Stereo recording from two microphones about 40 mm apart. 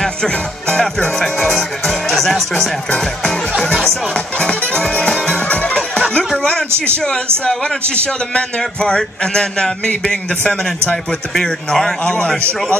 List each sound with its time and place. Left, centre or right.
0.0 s music: centre
1.4 s speech: centre
4.4 s a man's voice: left
4.9 s music: left
8.4 s a man's voice: left